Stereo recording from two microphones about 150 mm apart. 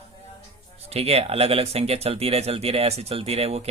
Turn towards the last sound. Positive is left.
turn(degrees=-40)  # may be behind; listen again after turning